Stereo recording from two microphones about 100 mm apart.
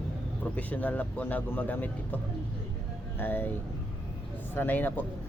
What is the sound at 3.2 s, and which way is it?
Speech, 20° left (ahead or behind).